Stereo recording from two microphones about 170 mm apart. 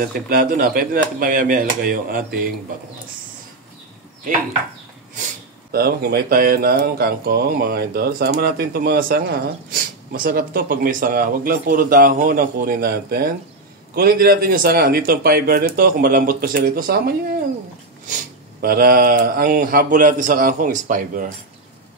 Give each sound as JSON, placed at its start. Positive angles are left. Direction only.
{"t": 0.0, "sound": "speech", "side_deg": -60}
{"t": 5.7, "sound": "speech", "side_deg": -65}
{"t": 18.6, "sound": "speech", "side_deg": -60}